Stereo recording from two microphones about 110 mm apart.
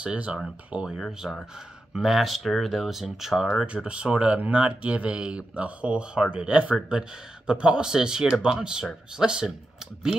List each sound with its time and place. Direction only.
0.0 s speech: 10° right (ahead or behind)